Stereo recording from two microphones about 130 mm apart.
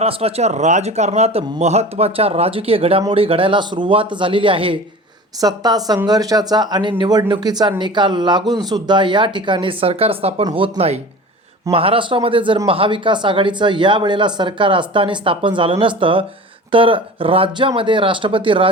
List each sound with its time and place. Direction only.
0.0 s a man's voice: 50° right (ahead or behind)
5.4 s a man's voice: 30° right (ahead or behind)